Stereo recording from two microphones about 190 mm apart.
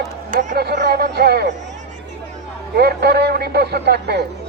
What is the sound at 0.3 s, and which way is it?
A man's voice, 50° right (ahead or behind).